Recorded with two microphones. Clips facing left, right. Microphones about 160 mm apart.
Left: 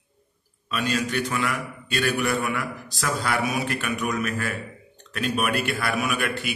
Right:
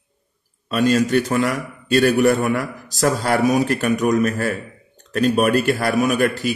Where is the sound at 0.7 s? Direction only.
40° right (ahead or behind).